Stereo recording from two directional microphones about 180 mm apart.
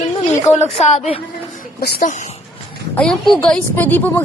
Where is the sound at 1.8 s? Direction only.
55° left (ahead or behind).